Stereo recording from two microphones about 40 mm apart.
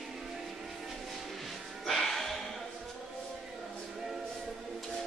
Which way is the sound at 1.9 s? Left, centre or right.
Centre.